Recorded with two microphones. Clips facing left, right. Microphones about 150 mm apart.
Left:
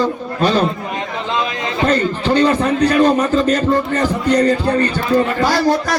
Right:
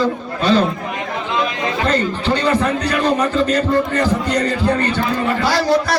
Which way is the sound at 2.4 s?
35° left (ahead or behind).